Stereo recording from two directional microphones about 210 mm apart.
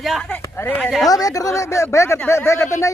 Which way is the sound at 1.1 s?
15° left (ahead or behind).